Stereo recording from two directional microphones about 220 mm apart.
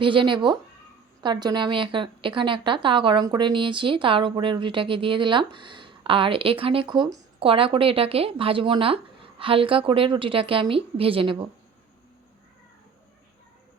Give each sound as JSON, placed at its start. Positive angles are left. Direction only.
{"t": 0.0, "sound": "a woman's voice", "side_deg": -20}